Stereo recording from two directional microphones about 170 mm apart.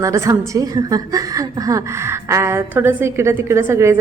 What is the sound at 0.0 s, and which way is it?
A woman's voice, 20° right (ahead or behind).